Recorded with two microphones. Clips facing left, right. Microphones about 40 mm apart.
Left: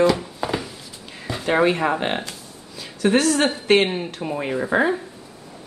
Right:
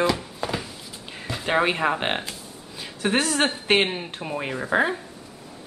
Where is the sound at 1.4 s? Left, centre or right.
Centre.